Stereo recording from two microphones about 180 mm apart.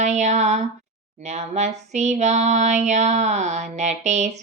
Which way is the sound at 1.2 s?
40° right (ahead or behind).